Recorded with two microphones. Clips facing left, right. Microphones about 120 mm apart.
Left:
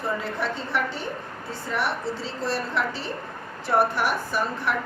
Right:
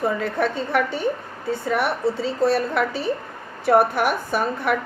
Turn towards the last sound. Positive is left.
turn(degrees=-55)  # may be behind; listen again after turning